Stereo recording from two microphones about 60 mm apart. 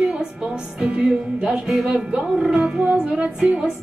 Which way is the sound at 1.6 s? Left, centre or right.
Centre.